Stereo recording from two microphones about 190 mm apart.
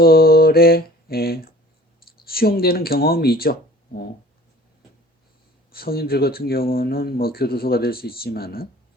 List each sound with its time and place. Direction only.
0.0 s mantra: 55° left (ahead or behind)
2.2 s speech: 55° left (ahead or behind)
5.7 s speech: 55° left (ahead or behind)